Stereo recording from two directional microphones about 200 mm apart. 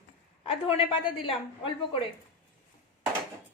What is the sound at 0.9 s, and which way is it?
A woman's voice, 25° left (ahead or behind).